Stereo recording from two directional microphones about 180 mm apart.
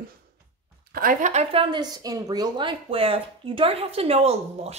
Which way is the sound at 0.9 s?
50° right (ahead or behind).